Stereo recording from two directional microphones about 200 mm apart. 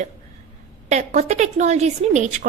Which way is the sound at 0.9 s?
35° right (ahead or behind).